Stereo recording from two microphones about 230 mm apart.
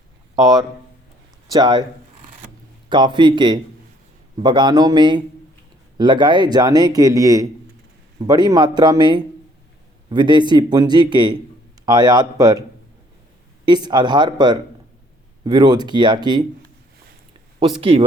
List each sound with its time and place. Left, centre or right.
1.5 s speech: centre
2.9 s a man's voice: centre
13.7 s a man's voice: centre
17.7 s a man's voice: right